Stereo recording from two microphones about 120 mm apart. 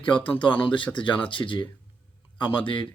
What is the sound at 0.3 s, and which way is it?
Speech, 45° left (ahead or behind).